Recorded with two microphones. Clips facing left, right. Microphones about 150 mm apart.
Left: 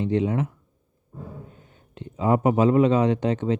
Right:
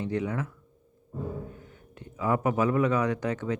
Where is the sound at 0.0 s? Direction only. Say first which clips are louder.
Left 7 dB; 20° left (ahead or behind).